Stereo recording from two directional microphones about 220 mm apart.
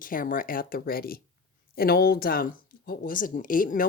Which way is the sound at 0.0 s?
40° left (ahead or behind).